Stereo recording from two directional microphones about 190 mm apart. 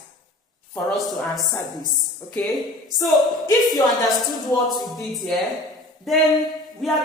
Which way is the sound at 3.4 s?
20° left (ahead or behind).